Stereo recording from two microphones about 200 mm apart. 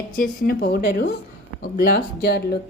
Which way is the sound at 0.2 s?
50° left (ahead or behind).